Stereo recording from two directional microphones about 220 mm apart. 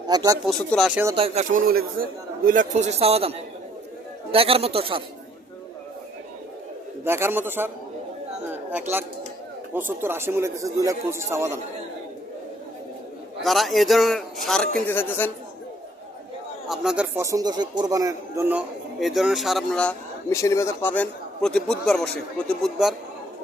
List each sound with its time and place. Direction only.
0.1 s speech: 15° right (ahead or behind)
0.4 s a man's voice: 5° left (ahead or behind)
1.0 s speech: 25° right (ahead or behind)
7.0 s speech: 10° right (ahead or behind)
8.7 s speech: 10° right (ahead or behind)
13.4 s a man's voice: centre (ahead or behind)
16.6 s a man's voice: centre (ahead or behind)